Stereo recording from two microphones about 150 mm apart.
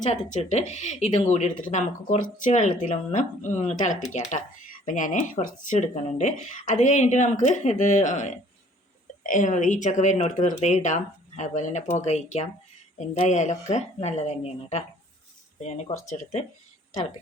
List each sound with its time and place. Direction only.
0.0 s speech: 50° left (ahead or behind)
16.1 s speech: 45° left (ahead or behind)